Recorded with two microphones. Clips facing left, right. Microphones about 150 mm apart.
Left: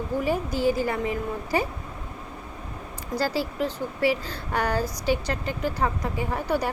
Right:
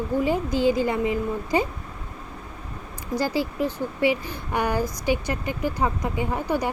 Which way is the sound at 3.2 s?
15° right (ahead or behind).